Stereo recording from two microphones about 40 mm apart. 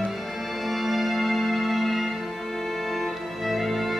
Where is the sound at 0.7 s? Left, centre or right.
Centre.